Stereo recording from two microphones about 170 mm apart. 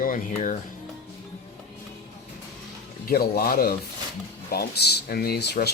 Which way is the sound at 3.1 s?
60° left (ahead or behind).